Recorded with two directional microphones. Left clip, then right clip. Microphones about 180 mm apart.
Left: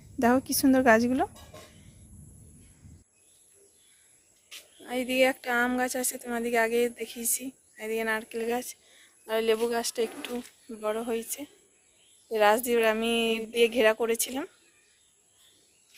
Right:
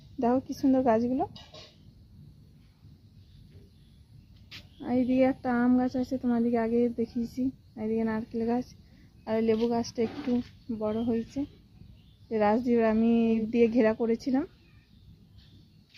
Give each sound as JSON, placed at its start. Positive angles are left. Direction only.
{"t": 0.2, "sound": "a woman's voice", "side_deg": 5}
{"t": 4.9, "sound": "a woman's voice", "side_deg": 5}
{"t": 9.8, "sound": "speech", "side_deg": 50}
{"t": 10.8, "sound": "a woman's voice", "side_deg": 15}